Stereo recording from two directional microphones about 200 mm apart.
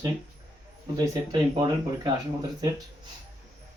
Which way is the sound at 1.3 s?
20° right (ahead or behind).